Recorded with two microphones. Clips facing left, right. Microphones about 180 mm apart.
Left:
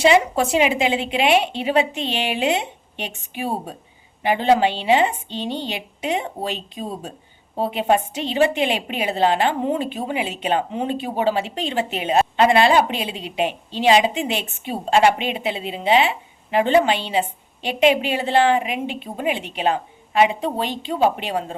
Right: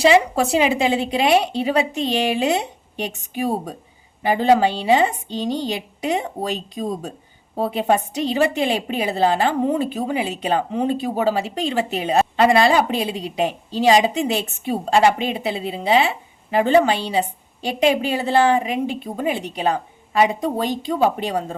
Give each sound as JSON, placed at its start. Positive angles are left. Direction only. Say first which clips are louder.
{"t": 0.0, "sound": "a woman's voice", "louder": "right 1 dB", "side_deg": -35}